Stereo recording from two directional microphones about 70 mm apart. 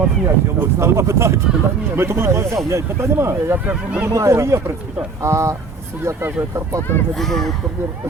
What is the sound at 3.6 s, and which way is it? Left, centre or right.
Speech, right.